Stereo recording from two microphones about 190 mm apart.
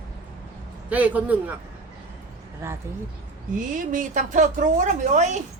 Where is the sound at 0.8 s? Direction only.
10° right (ahead or behind).